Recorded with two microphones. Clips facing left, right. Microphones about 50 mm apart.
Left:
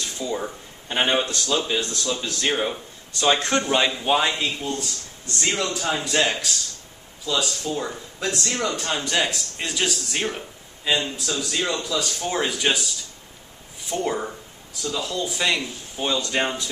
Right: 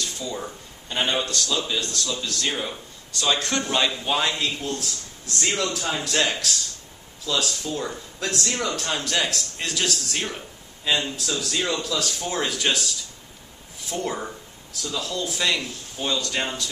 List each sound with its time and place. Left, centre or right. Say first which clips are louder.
0.0 s a man's voice: left 3 dB; centre